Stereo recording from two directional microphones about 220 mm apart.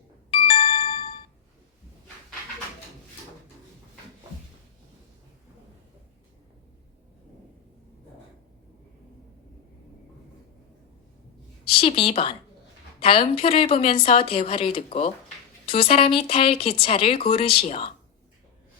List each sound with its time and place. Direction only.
0.3 s ringtone: 25° left (ahead or behind)
11.6 s a woman's voice: 25° left (ahead or behind)